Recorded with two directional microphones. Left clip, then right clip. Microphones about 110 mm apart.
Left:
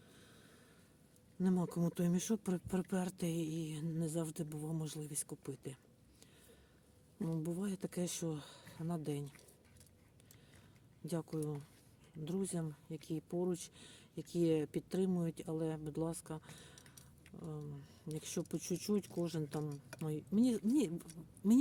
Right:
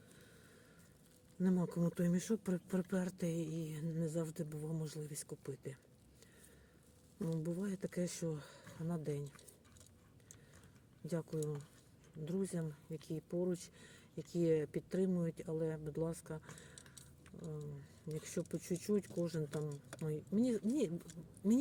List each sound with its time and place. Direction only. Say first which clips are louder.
1.4 s speech: even; 35° left (ahead or behind)
7.3 s speech: even; 30° left (ahead or behind)
11.0 s speech: even; 35° left (ahead or behind)
18.1 s speech: even; 35° left (ahead or behind)
19.6 s speech: even; 50° left (ahead or behind)